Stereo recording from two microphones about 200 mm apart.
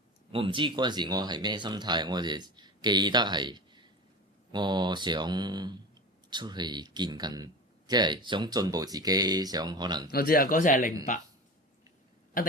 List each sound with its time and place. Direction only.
0.3 s speech: 25° right (ahead or behind)
10.1 s speech: 45° left (ahead or behind)